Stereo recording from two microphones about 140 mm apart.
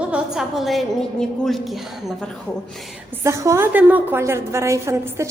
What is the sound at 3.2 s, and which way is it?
A woman's voice, 20° right (ahead or behind).